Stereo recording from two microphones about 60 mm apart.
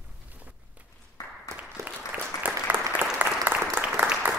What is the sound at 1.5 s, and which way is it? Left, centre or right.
Applause, right.